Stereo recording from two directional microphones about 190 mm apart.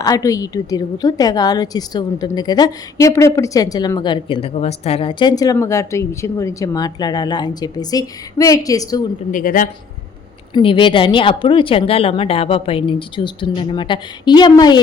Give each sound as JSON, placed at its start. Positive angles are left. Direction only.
{"t": 0.0, "sound": "a woman's voice", "side_deg": 20}
{"t": 9.3, "sound": "a woman's voice", "side_deg": 45}
{"t": 10.5, "sound": "a woman's voice", "side_deg": 25}